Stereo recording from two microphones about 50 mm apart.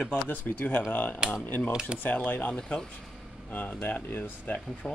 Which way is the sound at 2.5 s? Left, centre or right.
Centre.